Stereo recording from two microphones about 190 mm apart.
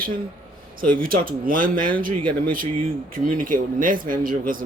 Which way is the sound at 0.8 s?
50° right (ahead or behind).